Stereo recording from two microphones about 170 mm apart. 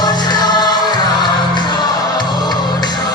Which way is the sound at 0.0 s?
25° left (ahead or behind).